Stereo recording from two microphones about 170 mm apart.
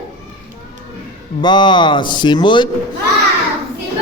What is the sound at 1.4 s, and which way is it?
A man's voice, 25° left (ahead or behind).